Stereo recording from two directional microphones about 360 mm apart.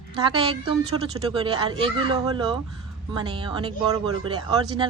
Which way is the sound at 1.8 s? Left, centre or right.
Centre.